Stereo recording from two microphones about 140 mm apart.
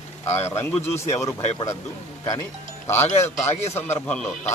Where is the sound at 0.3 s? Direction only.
50° left (ahead or behind).